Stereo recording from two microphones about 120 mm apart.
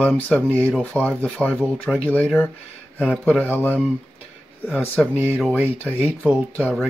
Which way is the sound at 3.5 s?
20° left (ahead or behind).